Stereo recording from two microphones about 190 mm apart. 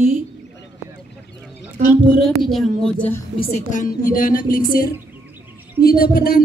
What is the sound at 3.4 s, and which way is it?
A man's voice, 40° left (ahead or behind).